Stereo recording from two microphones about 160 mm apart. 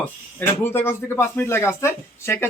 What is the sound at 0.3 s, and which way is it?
Speech, 15° left (ahead or behind).